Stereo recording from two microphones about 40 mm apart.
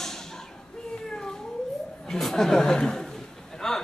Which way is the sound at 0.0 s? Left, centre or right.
Centre.